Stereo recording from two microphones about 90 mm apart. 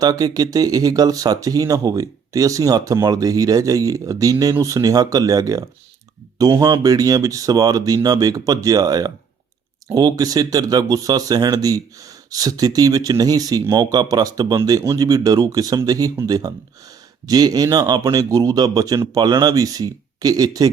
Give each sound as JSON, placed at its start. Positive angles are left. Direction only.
{"t": 0.0, "sound": "speech", "side_deg": -45}